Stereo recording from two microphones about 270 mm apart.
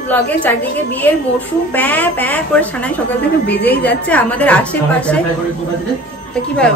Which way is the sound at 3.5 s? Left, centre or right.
Left.